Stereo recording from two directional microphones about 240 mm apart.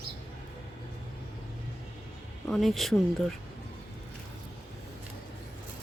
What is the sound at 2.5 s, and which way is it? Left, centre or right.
Speech, centre.